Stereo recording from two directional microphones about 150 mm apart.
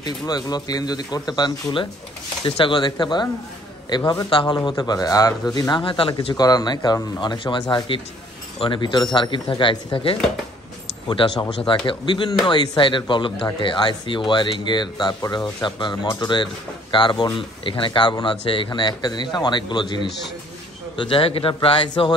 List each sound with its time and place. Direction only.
0.0 s speech: 25° left (ahead or behind)